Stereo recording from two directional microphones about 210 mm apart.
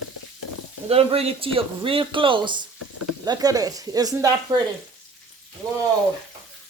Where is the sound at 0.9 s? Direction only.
30° right (ahead or behind).